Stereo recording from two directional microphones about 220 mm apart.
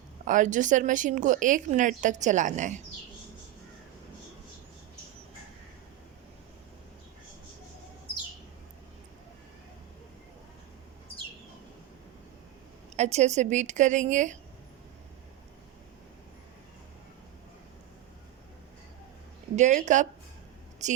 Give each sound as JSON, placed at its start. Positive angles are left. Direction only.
{"t": 0.3, "sound": "a woman's voice", "side_deg": -35}
{"t": 13.0, "sound": "a woman's voice", "side_deg": -30}
{"t": 19.5, "sound": "a woman's voice", "side_deg": -35}